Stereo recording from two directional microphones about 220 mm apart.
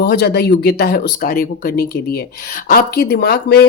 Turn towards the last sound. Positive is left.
turn(degrees=45)  # may be behind; listen again after turning